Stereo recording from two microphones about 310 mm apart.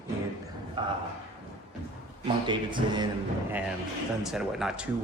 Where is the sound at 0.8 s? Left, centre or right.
Centre.